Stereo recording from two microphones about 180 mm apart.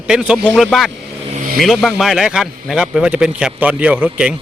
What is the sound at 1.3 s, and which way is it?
Vehicle, 45° right (ahead or behind).